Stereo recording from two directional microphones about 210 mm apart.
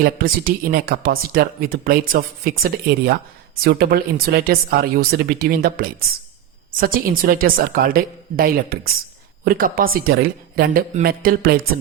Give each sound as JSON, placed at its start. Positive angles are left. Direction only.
{"t": 0.0, "sound": "speech", "side_deg": -45}